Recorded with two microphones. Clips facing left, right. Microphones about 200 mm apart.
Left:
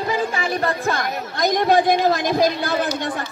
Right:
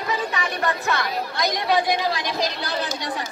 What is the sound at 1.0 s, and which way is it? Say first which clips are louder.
Speech: left 2 dB; 50° left (ahead or behind).